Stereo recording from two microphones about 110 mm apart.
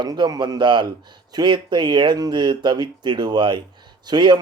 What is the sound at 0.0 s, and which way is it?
A man's voice, 40° right (ahead or behind).